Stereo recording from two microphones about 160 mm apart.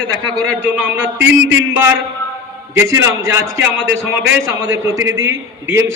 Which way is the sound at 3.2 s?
15° right (ahead or behind).